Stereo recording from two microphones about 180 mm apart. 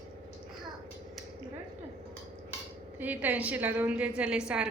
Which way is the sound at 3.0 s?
10° right (ahead or behind).